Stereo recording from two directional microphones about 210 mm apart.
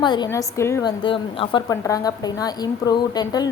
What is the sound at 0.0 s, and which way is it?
A woman's voice, 20° left (ahead or behind).